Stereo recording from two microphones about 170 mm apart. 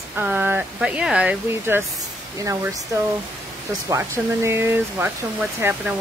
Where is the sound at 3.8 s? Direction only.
15° right (ahead or behind).